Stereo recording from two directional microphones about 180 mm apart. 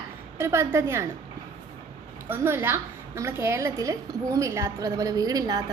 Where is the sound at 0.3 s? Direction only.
15° right (ahead or behind).